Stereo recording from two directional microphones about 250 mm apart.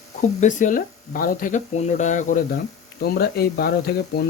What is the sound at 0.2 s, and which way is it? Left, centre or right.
Speech, left.